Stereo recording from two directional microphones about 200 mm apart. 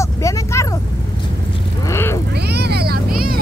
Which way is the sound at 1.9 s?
10° left (ahead or behind).